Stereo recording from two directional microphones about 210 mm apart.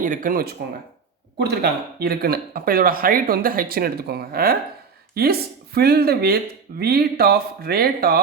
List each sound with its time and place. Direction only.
0.0 s speech: 40° right (ahead or behind)